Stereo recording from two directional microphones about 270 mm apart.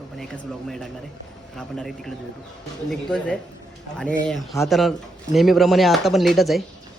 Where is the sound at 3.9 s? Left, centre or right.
Centre.